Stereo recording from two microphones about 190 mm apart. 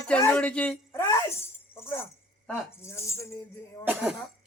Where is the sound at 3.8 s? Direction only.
5° right (ahead or behind).